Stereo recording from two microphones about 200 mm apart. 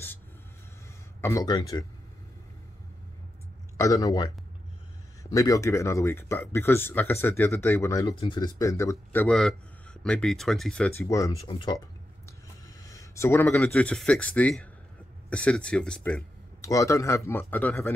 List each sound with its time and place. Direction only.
1.2 s speech: 15° left (ahead or behind)
3.7 s speech: 15° left (ahead or behind)
11.4 s speech: 25° left (ahead or behind)
12.3 s a sound: 15° left (ahead or behind)
13.6 s speech: 5° left (ahead or behind)
16.6 s speech: 15° left (ahead or behind)